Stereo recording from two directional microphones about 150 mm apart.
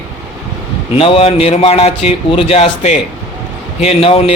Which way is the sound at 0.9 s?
40° left (ahead or behind).